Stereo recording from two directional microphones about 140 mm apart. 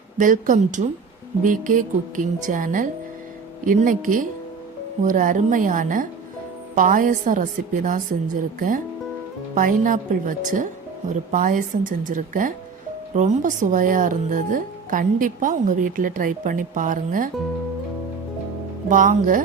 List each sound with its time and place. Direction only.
0.2 s a woman's voice: 65° right (ahead or behind)
9.6 s speech: 75° right (ahead or behind)
18.9 s speech: 70° right (ahead or behind)